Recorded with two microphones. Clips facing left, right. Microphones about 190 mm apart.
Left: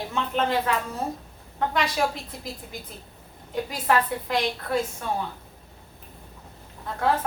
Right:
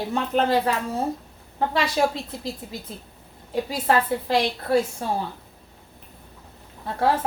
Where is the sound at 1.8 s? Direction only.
30° right (ahead or behind).